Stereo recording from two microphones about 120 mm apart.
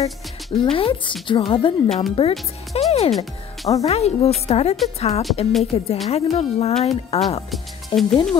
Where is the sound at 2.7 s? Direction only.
55° left (ahead or behind).